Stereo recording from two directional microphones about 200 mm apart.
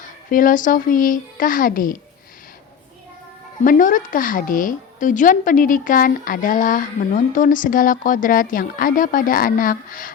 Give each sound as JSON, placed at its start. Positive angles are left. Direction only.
{"t": 0.3, "sound": "speech", "side_deg": 40}
{"t": 3.6, "sound": "speech", "side_deg": 40}